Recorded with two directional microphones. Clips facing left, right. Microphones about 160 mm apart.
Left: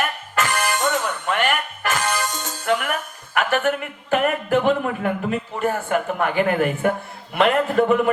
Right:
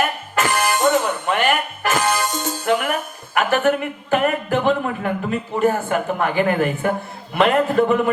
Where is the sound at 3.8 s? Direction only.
35° right (ahead or behind).